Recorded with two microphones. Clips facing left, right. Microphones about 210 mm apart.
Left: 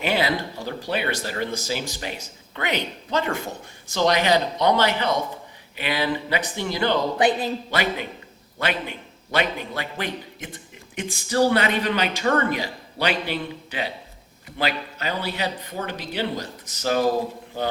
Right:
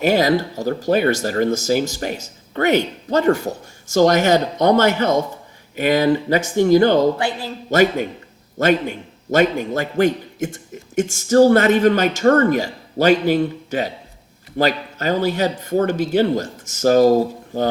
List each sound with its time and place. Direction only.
0.0 s a man's voice: 40° right (ahead or behind)
7.2 s speech: 20° left (ahead or behind)
7.7 s a man's voice: 45° right (ahead or behind)